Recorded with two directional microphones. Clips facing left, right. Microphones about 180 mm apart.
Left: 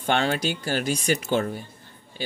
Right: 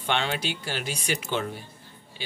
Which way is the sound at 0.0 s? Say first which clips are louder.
Left 4 dB; 45° left (ahead or behind).